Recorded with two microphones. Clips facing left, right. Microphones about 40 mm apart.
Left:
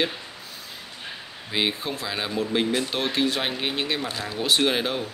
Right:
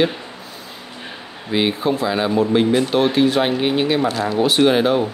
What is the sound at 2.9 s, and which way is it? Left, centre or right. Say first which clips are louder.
Speech: right 9 dB; centre.